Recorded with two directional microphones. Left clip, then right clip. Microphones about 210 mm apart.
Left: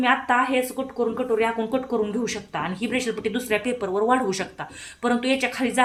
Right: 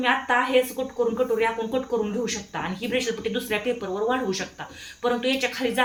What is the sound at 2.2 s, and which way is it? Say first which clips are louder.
Speech: left 1 dB; 45° left (ahead or behind).